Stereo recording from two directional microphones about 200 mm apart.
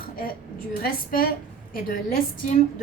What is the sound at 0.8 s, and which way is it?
A woman's voice, 45° left (ahead or behind).